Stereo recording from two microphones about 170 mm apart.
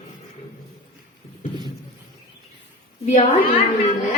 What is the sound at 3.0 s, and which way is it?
Speech, 45° left (ahead or behind).